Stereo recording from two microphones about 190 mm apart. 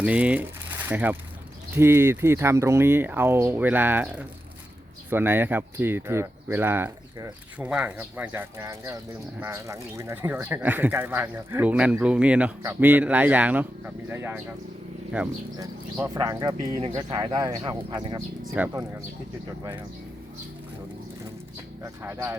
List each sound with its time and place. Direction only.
0.0 s speech: 5° right (ahead or behind)
16.1 s speech: 20° right (ahead or behind)
18.5 s speech: 10° right (ahead or behind)
21.8 s speech: 15° right (ahead or behind)